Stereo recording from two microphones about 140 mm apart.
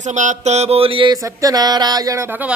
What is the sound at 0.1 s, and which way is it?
Mantra, 60° right (ahead or behind).